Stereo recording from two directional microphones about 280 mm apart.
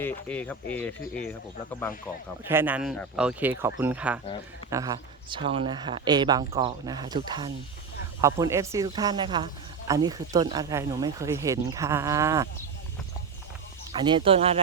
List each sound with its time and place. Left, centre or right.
0.0 s speech: centre
2.4 s speech: centre
13.9 s speech: centre